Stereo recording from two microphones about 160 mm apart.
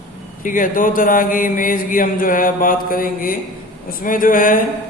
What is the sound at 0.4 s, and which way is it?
Speech, 55° left (ahead or behind).